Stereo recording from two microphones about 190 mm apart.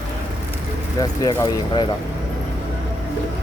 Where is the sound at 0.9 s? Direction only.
20° left (ahead or behind).